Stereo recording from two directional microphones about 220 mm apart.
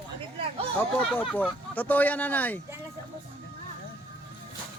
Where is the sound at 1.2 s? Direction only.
5° left (ahead or behind).